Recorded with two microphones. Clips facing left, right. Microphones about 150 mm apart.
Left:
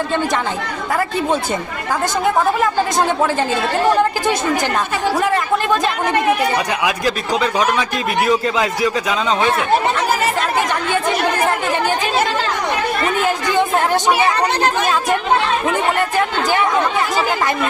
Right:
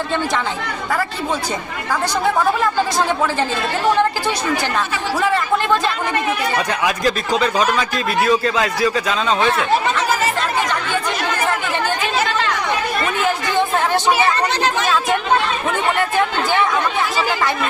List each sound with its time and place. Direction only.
6.8 s speech: 10° left (ahead or behind)